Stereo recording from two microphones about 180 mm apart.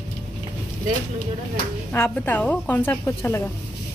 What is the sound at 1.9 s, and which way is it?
Speech, 10° left (ahead or behind).